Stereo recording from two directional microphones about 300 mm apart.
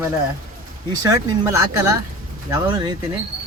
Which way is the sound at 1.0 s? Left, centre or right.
Centre.